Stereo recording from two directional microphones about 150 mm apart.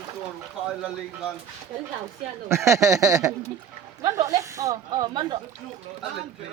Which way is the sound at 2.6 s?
20° right (ahead or behind).